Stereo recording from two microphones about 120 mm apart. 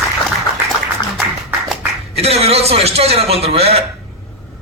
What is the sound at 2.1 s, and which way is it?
A man's voice, 60° right (ahead or behind).